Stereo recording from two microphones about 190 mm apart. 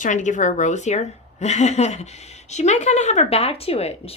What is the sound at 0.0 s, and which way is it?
A woman's voice, 40° left (ahead or behind).